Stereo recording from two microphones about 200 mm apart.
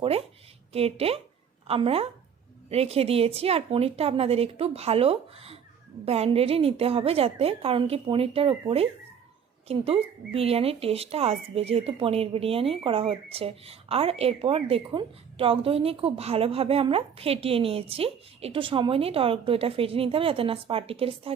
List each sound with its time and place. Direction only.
0.7 s a woman's voice: 30° right (ahead or behind)